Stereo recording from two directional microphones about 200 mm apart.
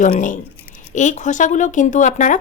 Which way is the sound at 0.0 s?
40° left (ahead or behind).